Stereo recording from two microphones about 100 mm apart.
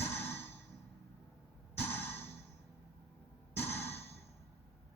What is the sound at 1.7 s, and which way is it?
Music, 20° left (ahead or behind).